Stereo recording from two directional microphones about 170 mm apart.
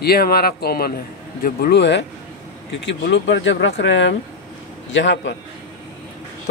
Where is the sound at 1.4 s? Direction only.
75° left (ahead or behind); by 5.3 s 90° left.